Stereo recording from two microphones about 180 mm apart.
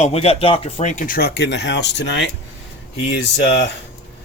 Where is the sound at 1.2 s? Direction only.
65° left (ahead or behind).